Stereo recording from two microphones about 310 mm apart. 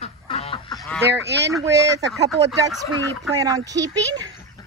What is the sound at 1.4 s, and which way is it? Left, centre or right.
Speech, centre.